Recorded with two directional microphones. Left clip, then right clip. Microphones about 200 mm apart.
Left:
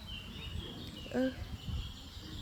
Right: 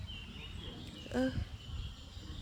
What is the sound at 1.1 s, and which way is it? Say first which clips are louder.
Speech: left 1 dB; 10° right (ahead or behind).